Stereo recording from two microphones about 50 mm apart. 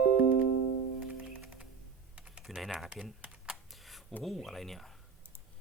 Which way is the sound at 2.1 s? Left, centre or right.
Right.